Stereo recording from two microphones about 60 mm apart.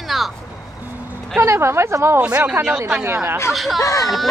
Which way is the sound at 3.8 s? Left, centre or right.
Left.